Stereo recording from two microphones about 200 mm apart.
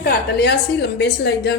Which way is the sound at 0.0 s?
55° left (ahead or behind).